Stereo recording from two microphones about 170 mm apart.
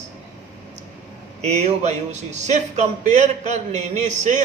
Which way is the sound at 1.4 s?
40° right (ahead or behind).